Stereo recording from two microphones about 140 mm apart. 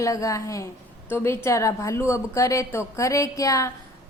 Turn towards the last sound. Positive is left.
turn(degrees=25)  # may be behind; listen again after turning